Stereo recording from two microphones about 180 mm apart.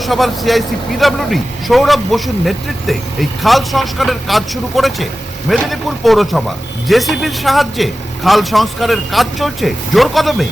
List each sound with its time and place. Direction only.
0.0 s speech: centre (ahead or behind)